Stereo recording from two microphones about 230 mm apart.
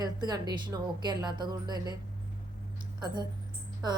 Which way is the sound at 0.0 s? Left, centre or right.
Centre.